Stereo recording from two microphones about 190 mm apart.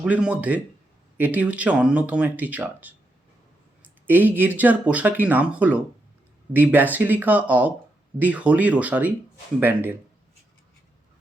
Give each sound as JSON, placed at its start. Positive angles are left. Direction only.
{"t": 0.0, "sound": "speech", "side_deg": -5}
{"t": 4.0, "sound": "speech", "side_deg": -10}